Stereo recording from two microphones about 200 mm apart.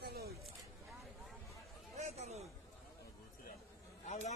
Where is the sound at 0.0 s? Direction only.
50° right (ahead or behind).